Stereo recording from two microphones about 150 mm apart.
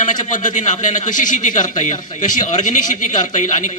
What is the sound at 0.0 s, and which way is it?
A man's voice, 55° left (ahead or behind).